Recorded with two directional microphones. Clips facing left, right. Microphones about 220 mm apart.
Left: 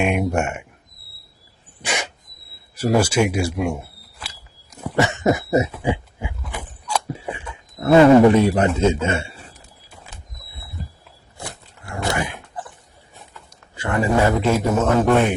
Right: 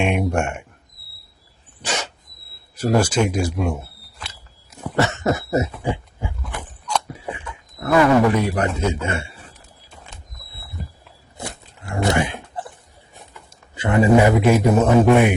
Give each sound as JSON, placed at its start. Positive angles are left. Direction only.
{"t": 0.0, "sound": "speech", "side_deg": 0}
{"t": 1.8, "sound": "dog", "side_deg": 15}
{"t": 2.7, "sound": "speech", "side_deg": 10}
{"t": 4.8, "sound": "a sound", "side_deg": 10}
{"t": 6.4, "sound": "chewing", "side_deg": 10}
{"t": 7.8, "sound": "a man's voice", "side_deg": 25}
{"t": 9.9, "sound": "a sound", "side_deg": 5}
{"t": 11.3, "sound": "dog", "side_deg": -20}
{"t": 13.3, "sound": "a man's voice", "side_deg": -20}